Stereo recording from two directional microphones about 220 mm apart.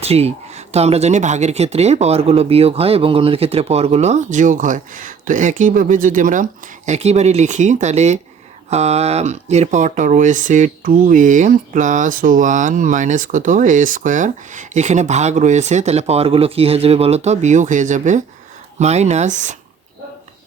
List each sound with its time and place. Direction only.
0.0 s speech: 30° right (ahead or behind)